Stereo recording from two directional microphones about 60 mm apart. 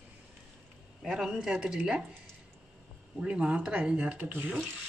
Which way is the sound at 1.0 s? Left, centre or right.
Centre.